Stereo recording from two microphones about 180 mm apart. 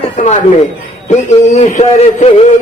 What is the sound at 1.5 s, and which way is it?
Speech, 40° left (ahead or behind).